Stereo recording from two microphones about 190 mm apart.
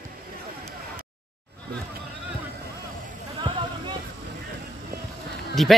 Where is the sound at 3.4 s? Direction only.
25° right (ahead or behind).